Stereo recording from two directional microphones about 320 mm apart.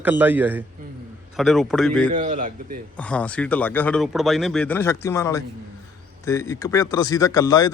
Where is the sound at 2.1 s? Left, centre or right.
Right.